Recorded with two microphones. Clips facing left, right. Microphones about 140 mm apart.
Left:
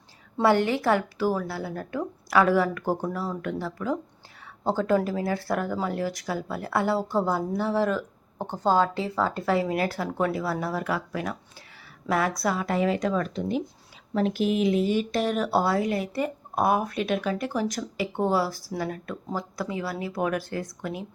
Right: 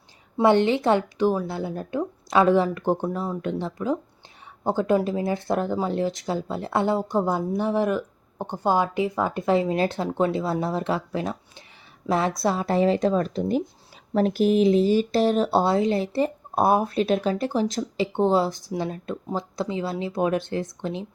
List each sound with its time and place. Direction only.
0.4 s a woman's voice: 20° right (ahead or behind)